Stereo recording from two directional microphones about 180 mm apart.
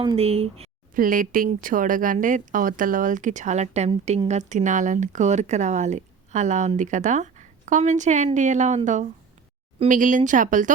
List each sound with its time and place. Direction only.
0.0 s speech: 30° right (ahead or behind)
0.9 s a woman's voice: 50° right (ahead or behind)